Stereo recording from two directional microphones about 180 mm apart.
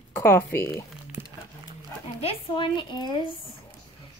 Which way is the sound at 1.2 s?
10° right (ahead or behind).